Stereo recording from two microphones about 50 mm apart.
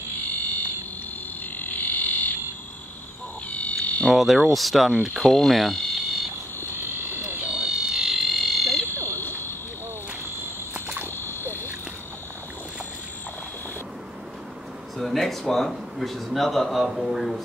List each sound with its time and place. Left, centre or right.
0.2 s fire alarm: left
1.6 s frog: left
3.4 s frog: left
4.1 s a man's voice: centre
6.7 s a sound: right
7.4 s frog: centre
8.0 s frog: centre
8.8 s frog: left
11.1 s frog: left
15.0 s a man's voice: centre